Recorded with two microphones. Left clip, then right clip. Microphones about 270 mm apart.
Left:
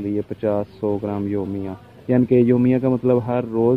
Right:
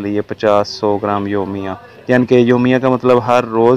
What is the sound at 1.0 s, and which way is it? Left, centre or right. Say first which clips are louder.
Speech: right 8 dB; centre.